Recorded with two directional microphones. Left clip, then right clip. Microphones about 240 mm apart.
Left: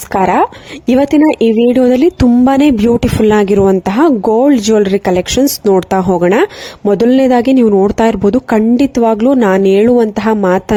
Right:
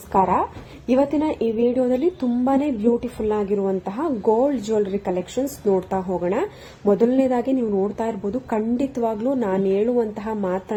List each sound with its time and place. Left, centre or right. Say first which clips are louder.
0.1 s a woman's voice: left 8 dB; left